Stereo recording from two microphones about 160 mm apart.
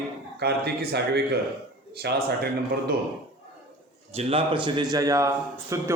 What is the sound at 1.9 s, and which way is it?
Speech, 90° right.